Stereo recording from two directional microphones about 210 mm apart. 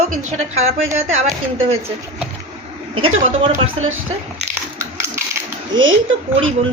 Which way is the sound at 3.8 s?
75° right (ahead or behind).